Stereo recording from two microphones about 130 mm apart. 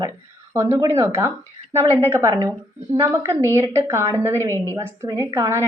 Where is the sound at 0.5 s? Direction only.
20° right (ahead or behind).